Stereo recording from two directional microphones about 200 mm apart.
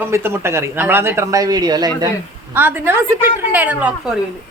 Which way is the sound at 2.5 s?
10° right (ahead or behind).